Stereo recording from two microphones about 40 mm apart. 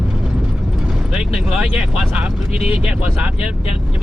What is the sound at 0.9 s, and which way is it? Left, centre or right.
Vehicle, centre.